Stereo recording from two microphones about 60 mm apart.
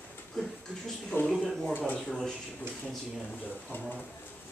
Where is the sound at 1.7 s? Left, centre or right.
Left.